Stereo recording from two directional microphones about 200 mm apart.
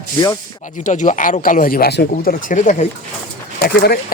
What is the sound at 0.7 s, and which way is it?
Speech, 40° left (ahead or behind).